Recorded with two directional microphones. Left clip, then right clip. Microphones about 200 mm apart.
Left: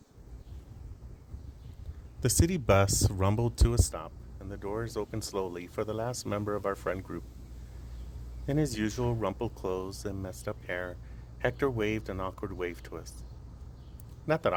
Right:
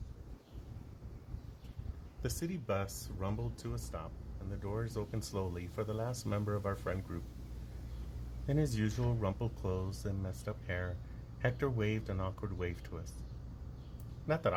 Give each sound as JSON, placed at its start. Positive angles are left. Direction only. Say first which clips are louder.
{"t": 2.2, "sound": "speech", "louder": "left 12 dB", "side_deg": 55}
{"t": 8.4, "sound": "speech", "louder": "left 6 dB", "side_deg": 50}
{"t": 14.3, "sound": "speech", "louder": "left 5 dB", "side_deg": 55}